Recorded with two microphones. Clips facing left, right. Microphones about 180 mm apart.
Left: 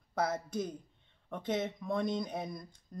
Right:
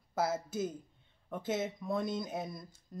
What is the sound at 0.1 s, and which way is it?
Speech, 5° right (ahead or behind).